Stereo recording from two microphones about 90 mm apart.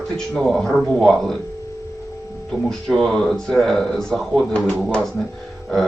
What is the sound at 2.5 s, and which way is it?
Speech, 5° left (ahead or behind).